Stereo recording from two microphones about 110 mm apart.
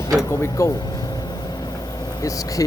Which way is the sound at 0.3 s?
25° left (ahead or behind).